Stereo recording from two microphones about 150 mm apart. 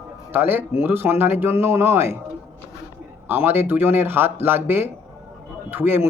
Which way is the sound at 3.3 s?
15° right (ahead or behind).